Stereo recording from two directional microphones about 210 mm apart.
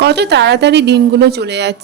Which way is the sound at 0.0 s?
55° right (ahead or behind).